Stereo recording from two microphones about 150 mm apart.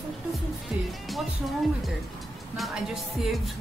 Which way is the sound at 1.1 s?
Centre (ahead or behind).